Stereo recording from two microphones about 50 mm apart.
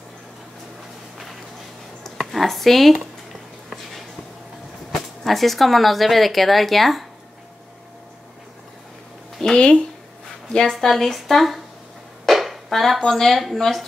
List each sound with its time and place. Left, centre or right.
2.0 s a sound: centre
5.2 s speech: centre
9.4 s speech: centre